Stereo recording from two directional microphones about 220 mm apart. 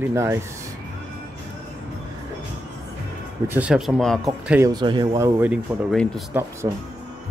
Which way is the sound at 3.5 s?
5° right (ahead or behind).